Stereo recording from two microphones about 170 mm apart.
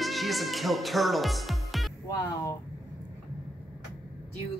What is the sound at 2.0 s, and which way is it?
Speech, 20° left (ahead or behind).